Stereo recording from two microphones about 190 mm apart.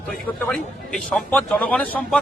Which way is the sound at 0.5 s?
5° left (ahead or behind).